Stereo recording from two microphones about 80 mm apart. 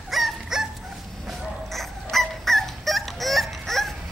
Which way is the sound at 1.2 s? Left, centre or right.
Centre.